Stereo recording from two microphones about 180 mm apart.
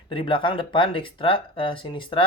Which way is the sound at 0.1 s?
30° left (ahead or behind).